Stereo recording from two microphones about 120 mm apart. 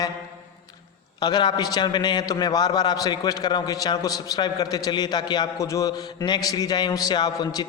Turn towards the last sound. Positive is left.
turn(degrees=35)  # may be behind; listen again after turning